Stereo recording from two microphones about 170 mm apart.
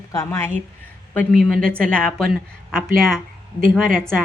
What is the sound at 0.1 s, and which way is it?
A woman's voice, 15° left (ahead or behind).